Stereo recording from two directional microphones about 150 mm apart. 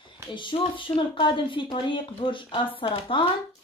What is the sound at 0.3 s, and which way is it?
A woman's voice, 35° left (ahead or behind).